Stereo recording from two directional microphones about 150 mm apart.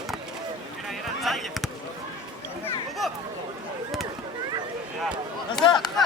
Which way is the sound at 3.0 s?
Centre (ahead or behind).